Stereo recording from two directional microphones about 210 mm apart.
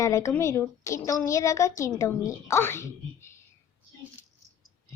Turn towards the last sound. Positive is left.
turn(degrees=15)  # may be behind; listen again after turning